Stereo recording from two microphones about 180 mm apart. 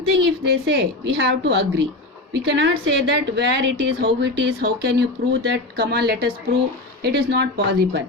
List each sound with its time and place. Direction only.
0.2 s a woman's voice: 70° right (ahead or behind)